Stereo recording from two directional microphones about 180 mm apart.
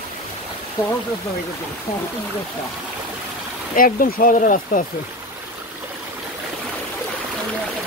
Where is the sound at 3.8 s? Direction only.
50° left (ahead or behind).